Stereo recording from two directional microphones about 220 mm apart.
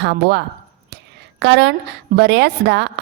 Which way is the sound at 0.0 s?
50° right (ahead or behind).